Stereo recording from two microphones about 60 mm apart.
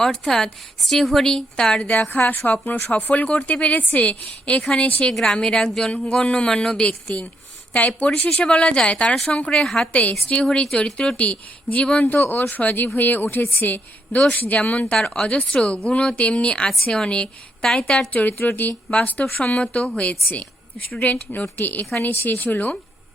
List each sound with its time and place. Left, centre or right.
0.0 s a woman's voice: centre
1.9 s a woman's voice: left; by 9.6 s centre
9.9 s a woman's voice: left
10.4 s a woman's voice: centre
15.3 s a woman's voice: left
18.1 s a woman's voice: left
19.4 s a woman's voice: centre